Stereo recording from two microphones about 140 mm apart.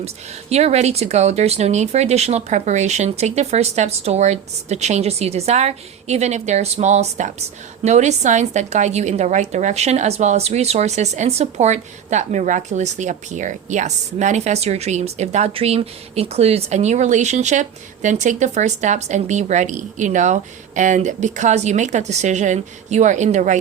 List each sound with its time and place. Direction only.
0.5 s a woman's voice: 50° right (ahead or behind)